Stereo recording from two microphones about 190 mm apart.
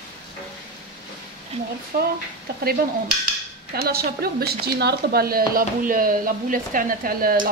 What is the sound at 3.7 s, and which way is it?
A woman's voice, 55° right (ahead or behind).